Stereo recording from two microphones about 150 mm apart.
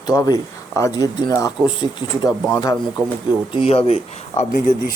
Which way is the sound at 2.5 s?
25° left (ahead or behind).